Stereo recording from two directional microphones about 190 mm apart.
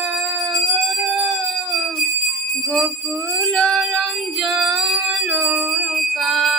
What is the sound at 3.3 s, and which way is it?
Music, 5° left (ahead or behind).